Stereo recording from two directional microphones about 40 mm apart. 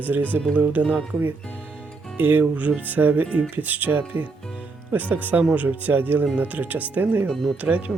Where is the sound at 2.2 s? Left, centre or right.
Right.